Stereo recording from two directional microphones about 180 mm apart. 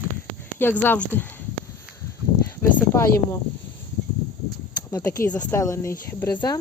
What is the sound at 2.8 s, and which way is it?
Speech, 15° left (ahead or behind).